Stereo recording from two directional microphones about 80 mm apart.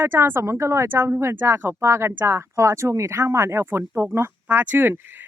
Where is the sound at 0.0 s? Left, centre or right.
Right.